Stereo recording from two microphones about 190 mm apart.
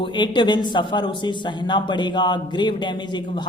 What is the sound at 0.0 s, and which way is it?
Speech, 25° left (ahead or behind).